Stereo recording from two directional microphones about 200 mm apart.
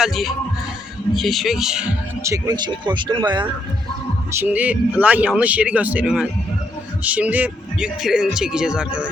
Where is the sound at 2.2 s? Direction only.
15° right (ahead or behind).